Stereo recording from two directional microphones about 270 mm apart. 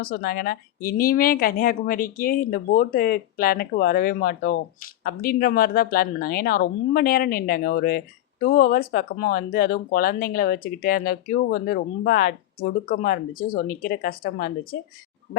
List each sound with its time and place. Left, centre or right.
0.0 s speech: left